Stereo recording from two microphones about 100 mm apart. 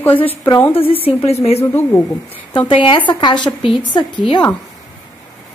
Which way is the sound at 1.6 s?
25° left (ahead or behind).